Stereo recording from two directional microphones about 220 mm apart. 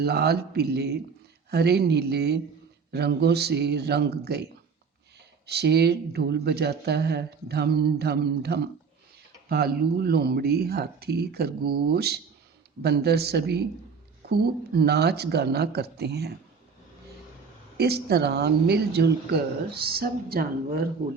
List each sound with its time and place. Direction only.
0.0 s speech: 45° right (ahead or behind)
5.5 s speech: 50° right (ahead or behind)
17.7 s speech: 45° right (ahead or behind)